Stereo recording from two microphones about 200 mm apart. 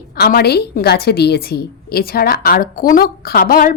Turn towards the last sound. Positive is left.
turn(degrees=45)  # may be behind; listen again after turning